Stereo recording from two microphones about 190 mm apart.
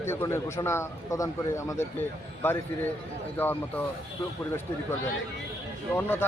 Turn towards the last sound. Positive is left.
turn(degrees=10)  # may be behind; listen again after turning